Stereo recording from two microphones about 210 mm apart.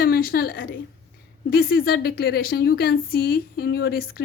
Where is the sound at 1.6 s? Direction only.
45° left (ahead or behind).